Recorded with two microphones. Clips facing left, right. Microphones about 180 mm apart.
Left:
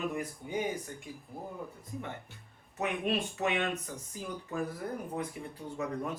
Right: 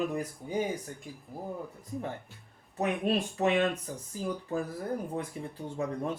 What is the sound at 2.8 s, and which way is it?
Speech, 35° right (ahead or behind).